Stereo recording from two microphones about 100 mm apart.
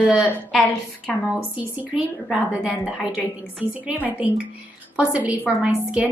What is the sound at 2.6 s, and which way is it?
A woman's voice, 10° right (ahead or behind).